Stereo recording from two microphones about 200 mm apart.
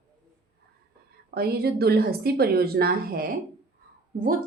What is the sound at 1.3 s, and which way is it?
A woman's voice, 50° right (ahead or behind).